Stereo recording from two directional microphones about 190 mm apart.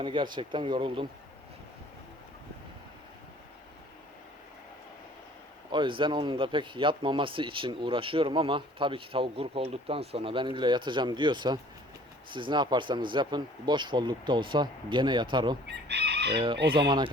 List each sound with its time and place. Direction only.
0.0 s speech: 25° right (ahead or behind)
5.7 s speech: 25° right (ahead or behind)
15.6 s speech: 65° right (ahead or behind)
16.3 s speech: 25° right (ahead or behind)